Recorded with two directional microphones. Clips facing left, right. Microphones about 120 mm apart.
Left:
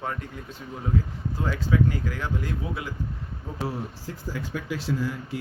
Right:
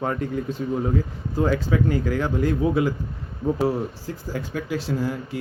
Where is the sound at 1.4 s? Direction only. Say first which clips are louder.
Right 4 dB; 55° right (ahead or behind).